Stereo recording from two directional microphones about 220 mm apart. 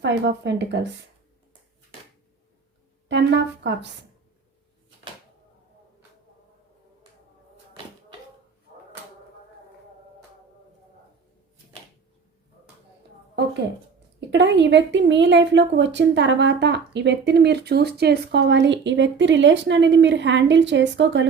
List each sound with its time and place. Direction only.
0.0 s a woman's voice: 50° right (ahead or behind)
3.1 s a woman's voice: 50° right (ahead or behind)
14.2 s a woman's voice: 50° right (ahead or behind)